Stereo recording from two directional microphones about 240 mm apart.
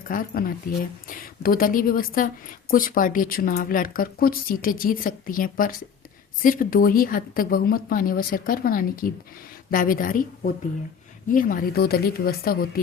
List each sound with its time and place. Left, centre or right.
0.1 s speech: left